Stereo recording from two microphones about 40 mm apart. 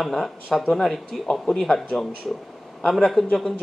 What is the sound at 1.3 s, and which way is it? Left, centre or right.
Speech, centre.